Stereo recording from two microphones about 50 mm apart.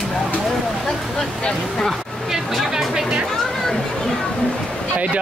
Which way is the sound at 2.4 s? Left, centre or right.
Centre.